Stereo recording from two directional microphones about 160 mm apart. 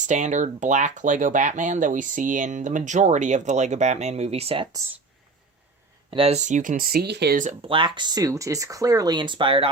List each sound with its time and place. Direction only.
0.0 s speech: 50° right (ahead or behind); by 4.8 s 30° right (ahead or behind)
6.1 s speech: 35° right (ahead or behind); by 7.3 s 90° right
7.7 s speech: 30° right (ahead or behind)